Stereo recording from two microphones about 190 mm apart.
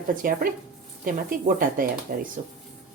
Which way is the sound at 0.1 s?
45° right (ahead or behind).